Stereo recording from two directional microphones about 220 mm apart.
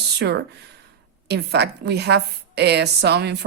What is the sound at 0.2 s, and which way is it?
A woman's voice, 50° right (ahead or behind).